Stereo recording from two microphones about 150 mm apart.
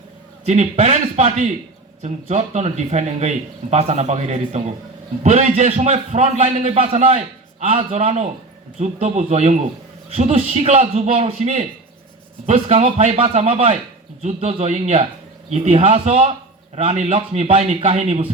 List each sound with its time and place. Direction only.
0.4 s a man's voice: 50° right (ahead or behind)